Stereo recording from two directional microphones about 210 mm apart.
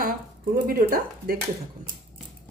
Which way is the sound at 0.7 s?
45° right (ahead or behind).